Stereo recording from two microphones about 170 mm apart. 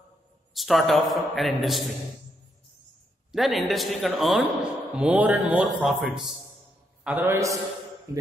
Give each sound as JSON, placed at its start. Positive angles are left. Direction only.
{"t": 0.6, "sound": "a man's voice", "side_deg": 0}
{"t": 3.3, "sound": "a man's voice", "side_deg": 0}
{"t": 7.1, "sound": "a man's voice", "side_deg": -15}